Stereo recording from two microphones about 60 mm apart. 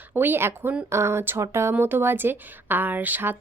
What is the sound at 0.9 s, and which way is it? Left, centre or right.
Speech, right.